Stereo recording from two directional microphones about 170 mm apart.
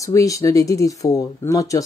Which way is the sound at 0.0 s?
20° left (ahead or behind).